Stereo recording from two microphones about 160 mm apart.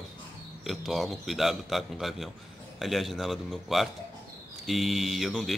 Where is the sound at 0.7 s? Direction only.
Centre (ahead or behind).